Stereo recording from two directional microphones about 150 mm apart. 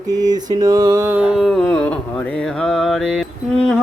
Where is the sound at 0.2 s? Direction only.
25° right (ahead or behind).